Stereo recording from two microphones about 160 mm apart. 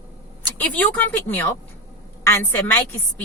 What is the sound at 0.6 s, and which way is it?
A woman's voice, 10° left (ahead or behind).